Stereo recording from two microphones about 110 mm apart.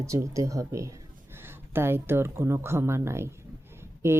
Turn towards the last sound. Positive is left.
turn(degrees=-25)  # may be behind; listen again after turning